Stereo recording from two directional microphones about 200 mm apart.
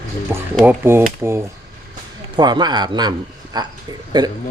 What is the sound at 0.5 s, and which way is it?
A man's voice, 10° right (ahead or behind).